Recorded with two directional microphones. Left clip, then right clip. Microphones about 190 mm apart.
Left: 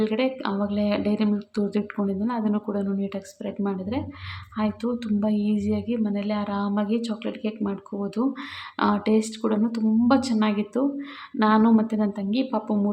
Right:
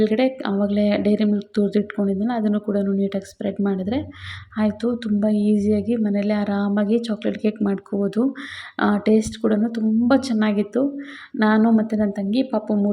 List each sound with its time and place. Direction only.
0.0 s a woman's voice: 20° right (ahead or behind)